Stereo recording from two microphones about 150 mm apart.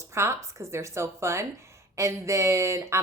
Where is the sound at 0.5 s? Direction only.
20° right (ahead or behind).